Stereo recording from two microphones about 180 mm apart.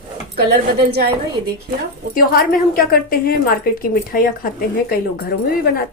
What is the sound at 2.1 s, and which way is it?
A woman's voice, 55° left (ahead or behind).